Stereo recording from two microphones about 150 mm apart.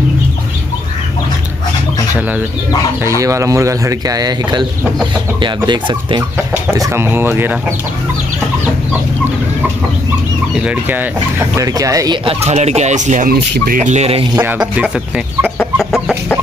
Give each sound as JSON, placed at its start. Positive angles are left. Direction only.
{"t": 3.2, "sound": "speech", "side_deg": -20}
{"t": 6.5, "sound": "speech", "side_deg": -15}
{"t": 10.5, "sound": "speech", "side_deg": -10}
{"t": 12.3, "sound": "speech", "side_deg": -45}
{"t": 13.3, "sound": "speech", "side_deg": -65}
{"t": 14.4, "sound": "speech", "side_deg": -10}
{"t": 15.4, "sound": "chicken", "side_deg": 5}